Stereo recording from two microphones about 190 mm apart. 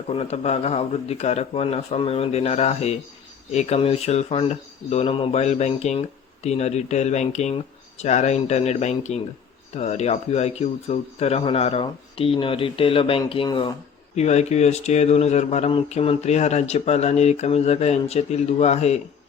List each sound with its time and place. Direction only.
0.1 s speech: 30° left (ahead or behind)
14.2 s speech: 35° left (ahead or behind)